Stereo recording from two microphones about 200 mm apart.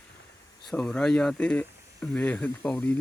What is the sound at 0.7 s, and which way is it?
Speech, 5° left (ahead or behind).